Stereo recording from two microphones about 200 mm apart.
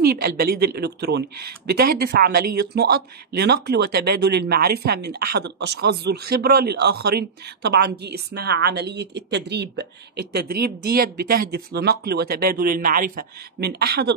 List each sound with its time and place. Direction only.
0.0 s speech: 50° right (ahead or behind)